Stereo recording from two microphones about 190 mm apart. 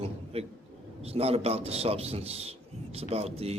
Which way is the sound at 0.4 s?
30° right (ahead or behind).